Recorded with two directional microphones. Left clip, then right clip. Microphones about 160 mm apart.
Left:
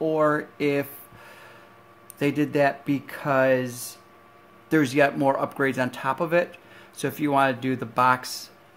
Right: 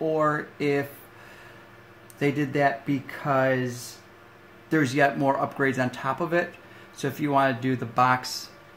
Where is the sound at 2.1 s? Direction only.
55° left (ahead or behind).